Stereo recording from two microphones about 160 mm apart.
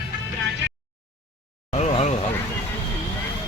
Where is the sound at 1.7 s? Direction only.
40° left (ahead or behind).